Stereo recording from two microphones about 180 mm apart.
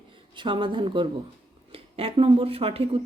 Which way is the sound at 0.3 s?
25° right (ahead or behind).